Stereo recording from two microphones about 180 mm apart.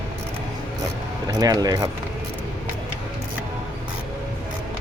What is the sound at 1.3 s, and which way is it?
Speech, 20° right (ahead or behind).